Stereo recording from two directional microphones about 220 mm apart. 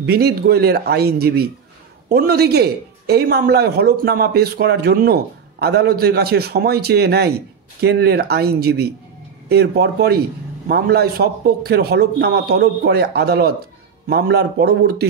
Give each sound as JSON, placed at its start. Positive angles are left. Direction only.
{"t": 0.0, "sound": "a man's voice", "side_deg": -45}